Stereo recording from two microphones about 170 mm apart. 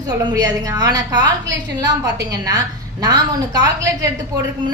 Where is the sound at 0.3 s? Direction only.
20° right (ahead or behind).